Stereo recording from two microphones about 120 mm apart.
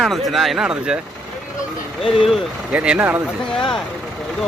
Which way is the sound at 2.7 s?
10° right (ahead or behind).